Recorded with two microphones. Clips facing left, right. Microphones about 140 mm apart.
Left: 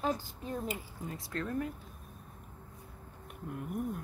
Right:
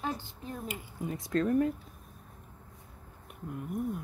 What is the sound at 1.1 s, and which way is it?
Speech, 25° right (ahead or behind).